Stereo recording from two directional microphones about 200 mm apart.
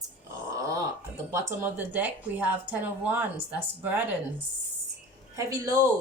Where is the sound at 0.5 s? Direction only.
15° right (ahead or behind).